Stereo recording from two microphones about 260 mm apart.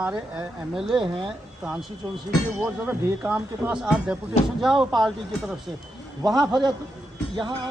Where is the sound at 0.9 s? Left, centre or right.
Centre.